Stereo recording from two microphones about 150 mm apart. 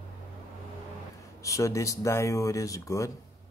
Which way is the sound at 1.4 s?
20° left (ahead or behind).